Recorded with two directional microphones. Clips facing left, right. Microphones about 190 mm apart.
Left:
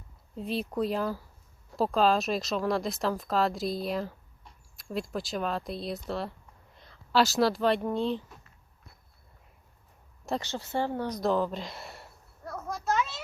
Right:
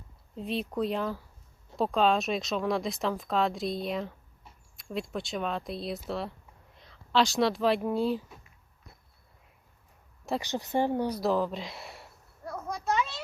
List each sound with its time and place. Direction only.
0.3 s speech: centre (ahead or behind)
10.4 s speech: 15° right (ahead or behind)
11.2 s a sound: centre (ahead or behind)